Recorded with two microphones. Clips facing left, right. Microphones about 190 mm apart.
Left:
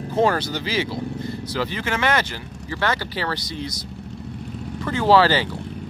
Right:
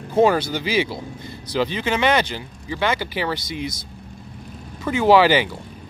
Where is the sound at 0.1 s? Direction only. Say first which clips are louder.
Right 3 dB; 10° right (ahead or behind).